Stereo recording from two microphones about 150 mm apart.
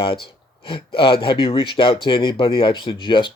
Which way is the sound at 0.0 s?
35° left (ahead or behind).